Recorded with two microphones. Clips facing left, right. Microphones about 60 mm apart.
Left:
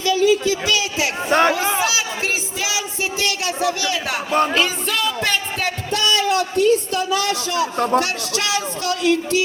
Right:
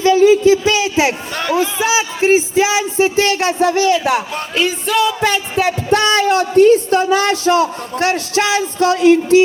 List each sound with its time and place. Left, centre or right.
0.0 s a sound: right
1.3 s speech: left
1.8 s music: right
3.9 s speech: centre
4.5 s music: centre
5.9 s a sound: right
8.0 s speech: right